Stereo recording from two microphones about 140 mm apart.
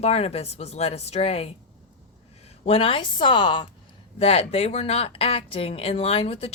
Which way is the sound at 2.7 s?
40° left (ahead or behind).